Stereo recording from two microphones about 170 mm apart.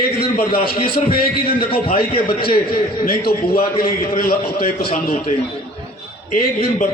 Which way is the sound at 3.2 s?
60° left (ahead or behind).